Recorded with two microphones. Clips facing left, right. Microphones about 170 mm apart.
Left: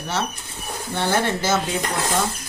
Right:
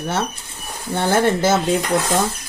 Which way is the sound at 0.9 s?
50° right (ahead or behind).